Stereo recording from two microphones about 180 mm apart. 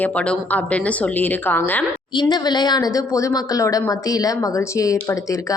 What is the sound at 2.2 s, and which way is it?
A woman's voice, 25° left (ahead or behind).